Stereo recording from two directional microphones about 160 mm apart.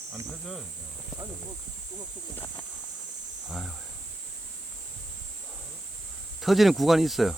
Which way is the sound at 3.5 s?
Centre (ahead or behind).